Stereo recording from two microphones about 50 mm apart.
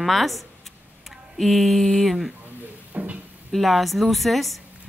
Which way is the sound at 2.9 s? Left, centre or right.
Right.